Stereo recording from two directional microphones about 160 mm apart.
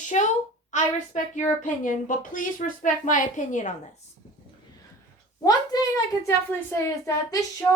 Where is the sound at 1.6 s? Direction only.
50° left (ahead or behind).